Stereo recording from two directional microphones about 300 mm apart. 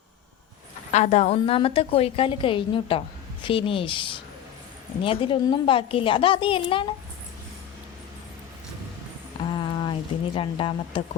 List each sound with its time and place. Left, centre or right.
0.9 s a woman's voice: left
9.6 s speech: centre